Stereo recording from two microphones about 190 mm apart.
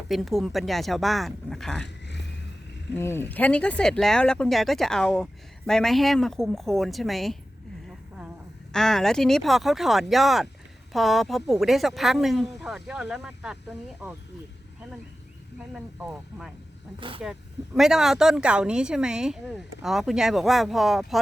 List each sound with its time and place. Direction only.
0.1 s speech: centre (ahead or behind)
1.8 s a sound: 65° left (ahead or behind)
3.0 s speech: 10° left (ahead or behind)
8.7 s speech: centre (ahead or behind)
15.7 s speech: centre (ahead or behind)
17.0 s speech: 25° right (ahead or behind)
17.7 s speech: centre (ahead or behind)